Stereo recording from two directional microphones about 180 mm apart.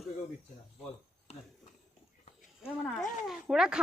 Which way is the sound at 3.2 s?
5° right (ahead or behind).